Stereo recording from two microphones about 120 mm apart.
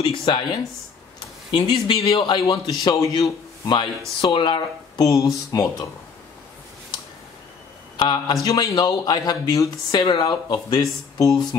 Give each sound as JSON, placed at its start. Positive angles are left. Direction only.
{"t": 0.0, "sound": "speech", "side_deg": 50}
{"t": 1.5, "sound": "speech", "side_deg": 45}
{"t": 2.4, "sound": "a man's voice", "side_deg": 30}
{"t": 8.0, "sound": "speech", "side_deg": 35}